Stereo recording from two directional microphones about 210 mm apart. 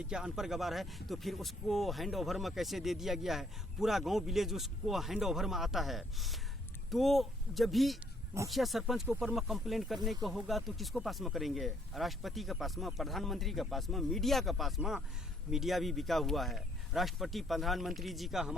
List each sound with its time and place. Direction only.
0.1 s speech: 5° right (ahead or behind)